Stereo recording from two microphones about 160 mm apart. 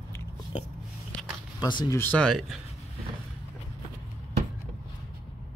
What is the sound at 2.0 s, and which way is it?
Speech, 10° left (ahead or behind).